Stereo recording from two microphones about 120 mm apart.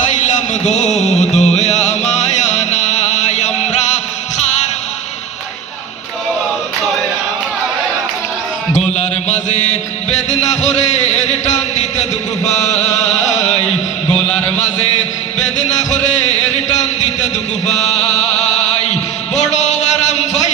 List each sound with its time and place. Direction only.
0.0 s music: 85° left
8.9 s music: 70° left (ahead or behind)
12.5 s chant: 70° left (ahead or behind)
17.7 s chant: 70° left (ahead or behind)
19.3 s a sound: 70° left (ahead or behind)